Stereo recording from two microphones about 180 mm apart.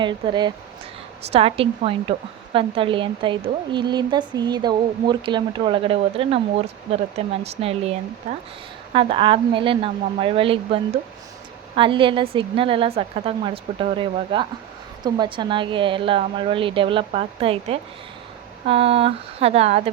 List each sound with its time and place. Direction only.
0.0 s a woman's voice: 25° right (ahead or behind)